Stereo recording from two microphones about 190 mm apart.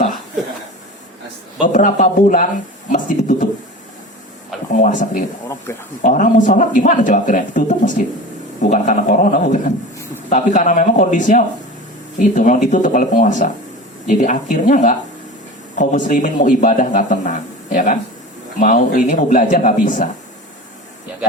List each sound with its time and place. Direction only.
1.6 s a man's voice: 40° left (ahead or behind)
4.8 s a man's voice: 45° left (ahead or behind)